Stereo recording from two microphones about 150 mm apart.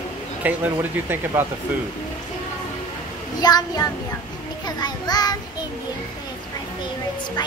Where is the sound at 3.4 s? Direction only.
25° left (ahead or behind).